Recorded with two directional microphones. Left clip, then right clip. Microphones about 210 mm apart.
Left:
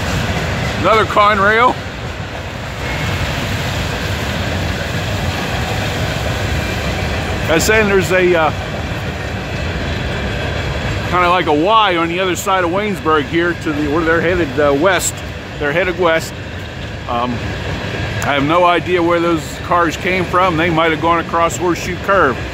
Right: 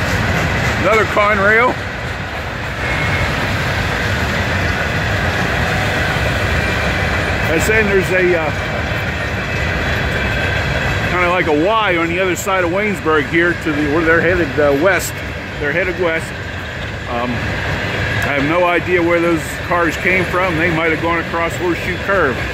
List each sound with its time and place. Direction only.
0.8 s speech: 5° left (ahead or behind)
7.5 s speech: 15° left (ahead or behind)
11.1 s speech: 10° left (ahead or behind)
15.6 s speech: 20° left (ahead or behind)
18.2 s speech: 10° left (ahead or behind)